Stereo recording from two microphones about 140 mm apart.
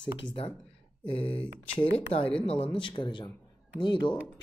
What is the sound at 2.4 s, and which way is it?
Speech, 45° left (ahead or behind).